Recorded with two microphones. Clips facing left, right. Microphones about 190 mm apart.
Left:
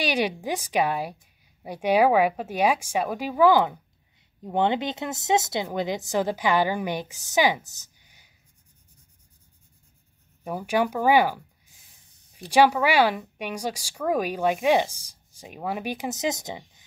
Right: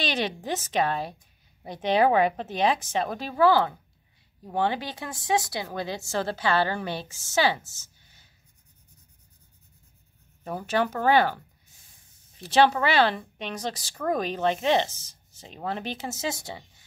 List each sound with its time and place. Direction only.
0.0 s speech: 10° left (ahead or behind)
10.4 s speech: 10° left (ahead or behind)